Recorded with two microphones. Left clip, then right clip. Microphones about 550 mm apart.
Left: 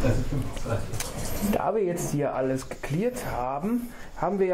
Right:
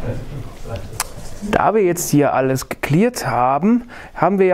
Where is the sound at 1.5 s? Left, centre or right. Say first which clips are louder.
Right 11 dB; right.